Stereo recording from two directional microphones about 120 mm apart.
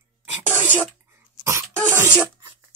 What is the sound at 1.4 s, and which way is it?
Cough, 20° right (ahead or behind).